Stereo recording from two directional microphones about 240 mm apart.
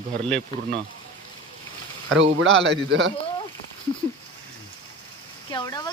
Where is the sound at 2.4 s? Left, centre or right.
Right.